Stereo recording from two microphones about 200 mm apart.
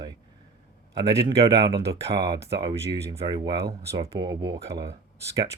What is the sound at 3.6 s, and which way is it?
Speech, 55° right (ahead or behind).